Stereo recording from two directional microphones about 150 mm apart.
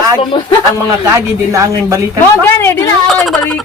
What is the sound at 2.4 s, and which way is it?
Speech, 15° left (ahead or behind).